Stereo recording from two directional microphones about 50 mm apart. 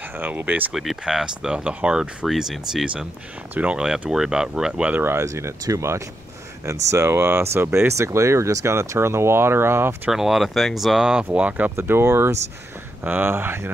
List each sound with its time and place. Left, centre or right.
0.2 s speech: right
1.0 s speech: centre
2.2 s speech: centre
4.9 s speech: right
5.2 s speech: right
10.1 s speech: centre
11.3 s speech: right
11.7 s speech: right
13.0 s speech: right